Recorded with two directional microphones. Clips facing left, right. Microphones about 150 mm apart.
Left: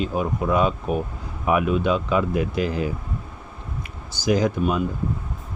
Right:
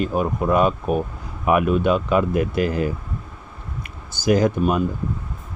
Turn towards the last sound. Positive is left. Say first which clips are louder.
# right 3 dB
turn(degrees=-55)  # may be behind; listen again after turning